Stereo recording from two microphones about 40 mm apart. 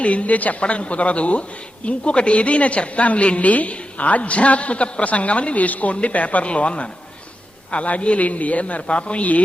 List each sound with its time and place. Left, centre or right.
0.0 s a woman's voice: left